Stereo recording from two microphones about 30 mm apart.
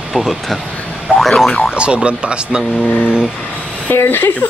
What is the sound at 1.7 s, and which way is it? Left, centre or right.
Speech, right.